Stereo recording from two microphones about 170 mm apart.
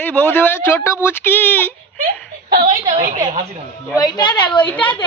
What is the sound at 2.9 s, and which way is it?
Speech, 45° right (ahead or behind).